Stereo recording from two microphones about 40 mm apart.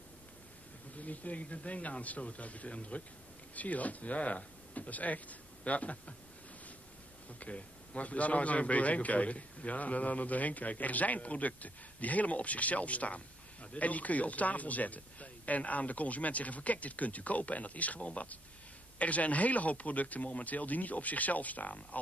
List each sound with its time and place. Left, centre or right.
0.9 s a man's voice: left
7.3 s a man's voice: left